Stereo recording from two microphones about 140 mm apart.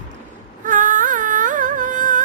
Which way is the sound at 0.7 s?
70° right (ahead or behind).